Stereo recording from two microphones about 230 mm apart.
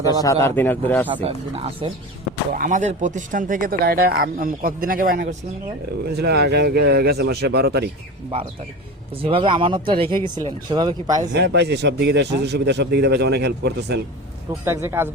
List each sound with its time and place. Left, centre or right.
0.1 s a man's voice: centre
1.1 s a man's voice: right
9.2 s speech: right
11.3 s a man's voice: right
14.6 s speech: centre